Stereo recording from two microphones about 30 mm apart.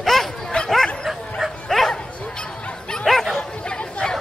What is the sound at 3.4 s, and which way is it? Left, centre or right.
Chatter, left.